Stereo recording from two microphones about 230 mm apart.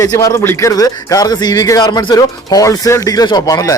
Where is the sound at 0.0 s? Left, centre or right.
Centre.